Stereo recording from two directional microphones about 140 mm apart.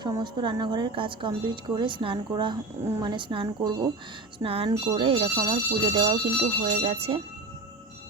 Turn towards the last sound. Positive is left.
turn(degrees=-45)  # may be behind; listen again after turning